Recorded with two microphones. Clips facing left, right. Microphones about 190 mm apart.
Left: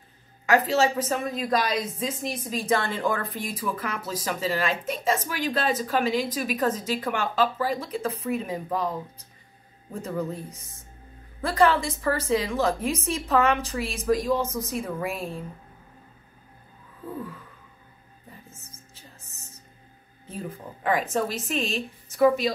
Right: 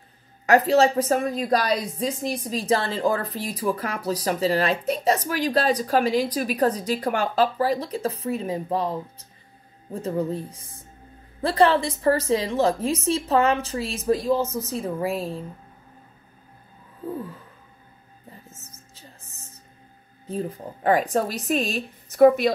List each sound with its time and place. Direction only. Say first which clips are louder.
0.5 s a woman's voice: right 4 dB; 40° right (ahead or behind)
11.4 s a woman's voice: right 2 dB; 35° right (ahead or behind)
20.2 s a woman's voice: right 6 dB; 35° right (ahead or behind)
22.1 s a woman's voice: right 5 dB; 55° right (ahead or behind)